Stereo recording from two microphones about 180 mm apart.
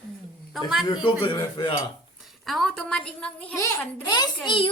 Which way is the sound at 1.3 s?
25° left (ahead or behind).